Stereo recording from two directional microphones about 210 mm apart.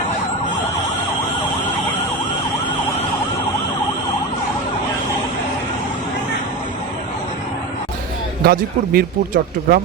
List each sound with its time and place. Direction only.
8.4 s speech: 45° right (ahead or behind)